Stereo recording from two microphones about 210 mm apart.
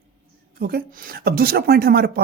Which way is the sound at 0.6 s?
45° right (ahead or behind).